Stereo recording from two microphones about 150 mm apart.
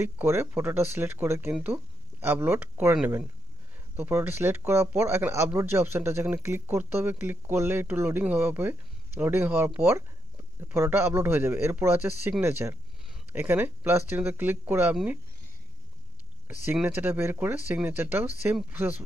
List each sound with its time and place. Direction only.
0.0 s speech: 15° right (ahead or behind)
16.7 s speech: 10° right (ahead or behind)